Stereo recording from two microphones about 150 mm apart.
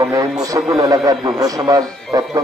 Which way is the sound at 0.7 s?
25° right (ahead or behind).